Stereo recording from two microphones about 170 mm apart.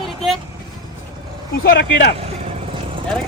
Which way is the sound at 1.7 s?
80° left.